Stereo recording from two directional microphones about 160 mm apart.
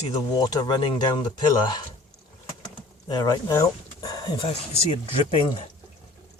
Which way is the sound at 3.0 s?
25° left (ahead or behind).